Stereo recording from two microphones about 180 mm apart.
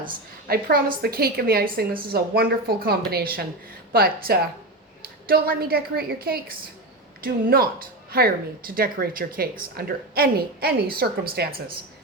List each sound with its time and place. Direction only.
0.0 s a woman's voice: 55° right (ahead or behind)